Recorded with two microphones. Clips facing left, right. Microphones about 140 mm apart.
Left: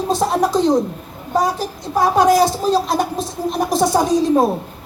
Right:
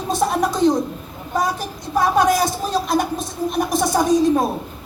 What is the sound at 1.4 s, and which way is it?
Speech, 35° left (ahead or behind).